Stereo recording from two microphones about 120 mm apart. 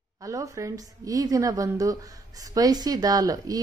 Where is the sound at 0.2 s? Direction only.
30° right (ahead or behind).